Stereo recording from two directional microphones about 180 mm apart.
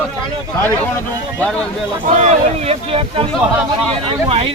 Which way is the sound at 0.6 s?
10° left (ahead or behind).